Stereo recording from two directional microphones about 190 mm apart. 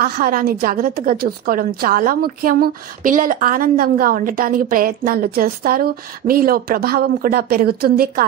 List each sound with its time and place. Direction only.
0.0 s a woman's voice: 50° right (ahead or behind)